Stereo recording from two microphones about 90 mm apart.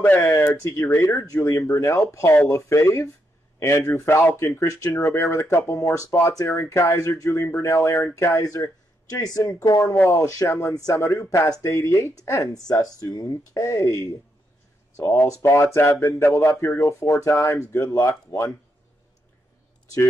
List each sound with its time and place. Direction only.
0.3 s speech: 25° left (ahead or behind)